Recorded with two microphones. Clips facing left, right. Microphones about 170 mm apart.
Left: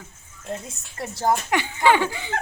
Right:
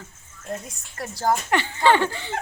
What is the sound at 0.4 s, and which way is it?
Speech, 25° left (ahead or behind).